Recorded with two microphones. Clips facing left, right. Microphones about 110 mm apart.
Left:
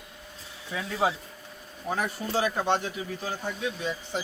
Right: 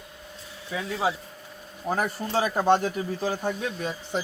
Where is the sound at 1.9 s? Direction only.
35° right (ahead or behind).